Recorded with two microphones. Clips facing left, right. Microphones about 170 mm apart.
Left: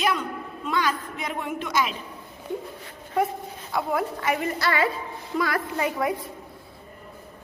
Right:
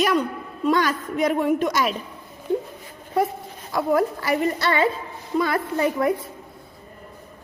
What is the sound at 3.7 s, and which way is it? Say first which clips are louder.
A woman's voice: right 5 dB; 40° right (ahead or behind).